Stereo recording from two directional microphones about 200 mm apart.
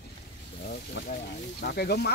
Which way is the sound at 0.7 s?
45° left (ahead or behind).